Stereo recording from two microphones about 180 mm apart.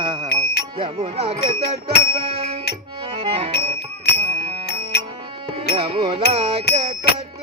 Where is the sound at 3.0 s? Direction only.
30° right (ahead or behind).